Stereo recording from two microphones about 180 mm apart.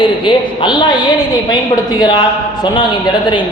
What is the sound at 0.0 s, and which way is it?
A man's voice, 25° left (ahead or behind).